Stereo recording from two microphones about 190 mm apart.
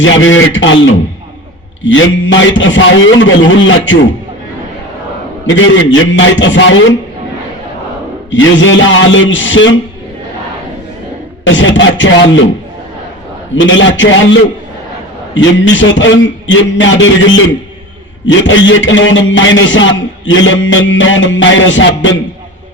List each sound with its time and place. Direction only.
0.0 s a man's voice: 85° left
5.5 s a man's voice: 90° left
8.3 s a man's voice: 80° left
11.4 s a man's voice: 80° left
13.6 s a man's voice: 80° left
15.4 s a man's voice: 75° left (ahead or behind)